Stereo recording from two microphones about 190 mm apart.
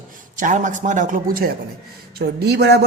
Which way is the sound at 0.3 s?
45° right (ahead or behind).